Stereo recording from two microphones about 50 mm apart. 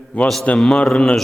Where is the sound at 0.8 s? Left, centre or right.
Centre.